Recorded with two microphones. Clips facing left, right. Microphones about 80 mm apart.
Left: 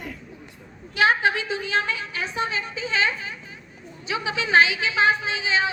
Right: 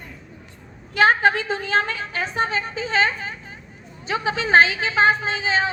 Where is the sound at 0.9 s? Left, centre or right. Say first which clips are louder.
Right 3 dB; right.